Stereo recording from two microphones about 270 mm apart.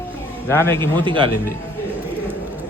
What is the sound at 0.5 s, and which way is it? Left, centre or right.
Speech, centre.